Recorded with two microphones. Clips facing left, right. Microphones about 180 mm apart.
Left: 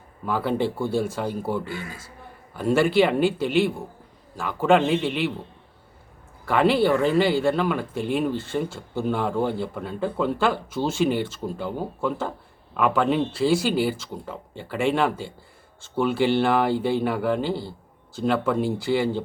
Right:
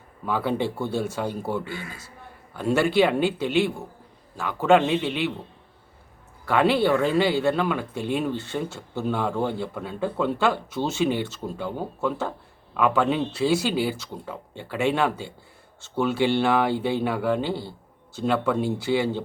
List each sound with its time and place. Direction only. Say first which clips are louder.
0.3 s speech: left 1 dB; centre (ahead or behind)
6.5 s speech: left 1 dB; centre (ahead or behind)